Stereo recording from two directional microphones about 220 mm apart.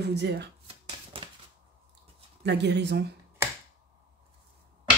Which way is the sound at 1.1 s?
25° right (ahead or behind).